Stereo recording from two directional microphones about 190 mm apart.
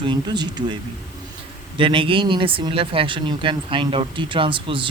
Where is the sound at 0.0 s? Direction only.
25° right (ahead or behind).